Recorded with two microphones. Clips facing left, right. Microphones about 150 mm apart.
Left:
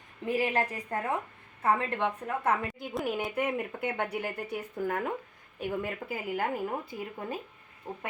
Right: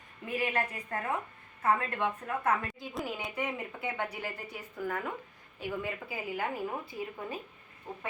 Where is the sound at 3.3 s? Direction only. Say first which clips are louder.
Left 5 dB; 50° left (ahead or behind).